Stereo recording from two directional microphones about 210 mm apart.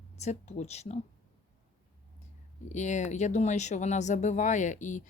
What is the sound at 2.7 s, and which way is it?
Speech, 35° left (ahead or behind).